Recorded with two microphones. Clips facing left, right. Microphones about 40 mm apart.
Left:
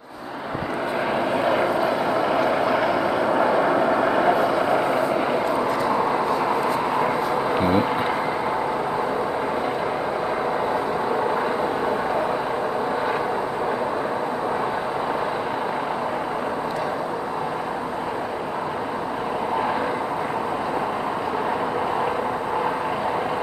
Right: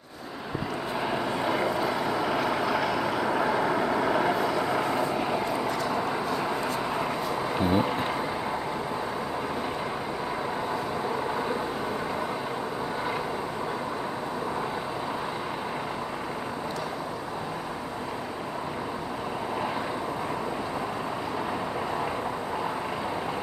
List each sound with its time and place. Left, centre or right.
1.1 s vehicle: left
7.5 s vehicle: left